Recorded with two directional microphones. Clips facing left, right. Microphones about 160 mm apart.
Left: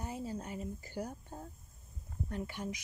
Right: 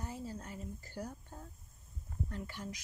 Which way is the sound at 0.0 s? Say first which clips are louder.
Left 3 dB; 15° left (ahead or behind).